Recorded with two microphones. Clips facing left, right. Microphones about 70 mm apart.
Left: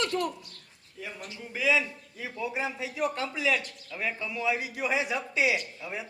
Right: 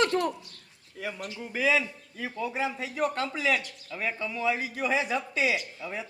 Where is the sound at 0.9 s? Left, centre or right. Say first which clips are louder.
Right 5 dB; right.